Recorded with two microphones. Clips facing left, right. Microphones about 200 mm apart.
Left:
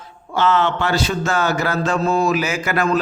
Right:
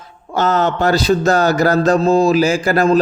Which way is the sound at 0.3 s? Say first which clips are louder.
Right 2 dB; 40° right (ahead or behind).